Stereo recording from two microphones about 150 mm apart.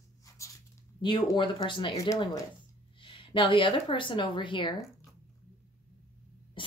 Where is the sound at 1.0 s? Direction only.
30° left (ahead or behind).